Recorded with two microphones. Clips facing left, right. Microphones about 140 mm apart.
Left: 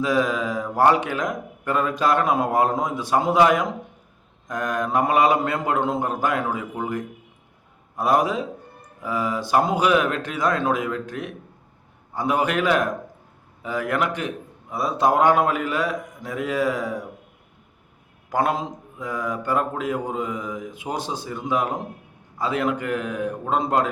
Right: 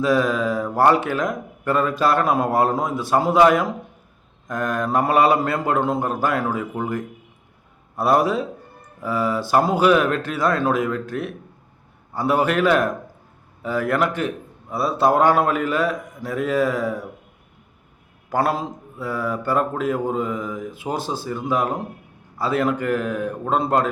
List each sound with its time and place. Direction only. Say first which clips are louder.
0.0 s mantra: right 3 dB; 15° left (ahead or behind)
0.8 s a man's voice: right 1 dB; 15° left (ahead or behind)
18.3 s a man's voice: right 1 dB; 20° left (ahead or behind)